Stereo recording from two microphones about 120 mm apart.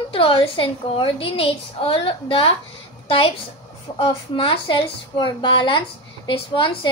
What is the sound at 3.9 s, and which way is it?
A woman's voice, 50° left (ahead or behind).